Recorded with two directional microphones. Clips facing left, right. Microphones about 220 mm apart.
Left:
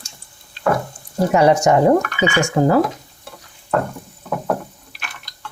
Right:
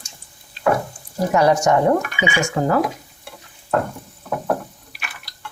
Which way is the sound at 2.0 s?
15° right (ahead or behind).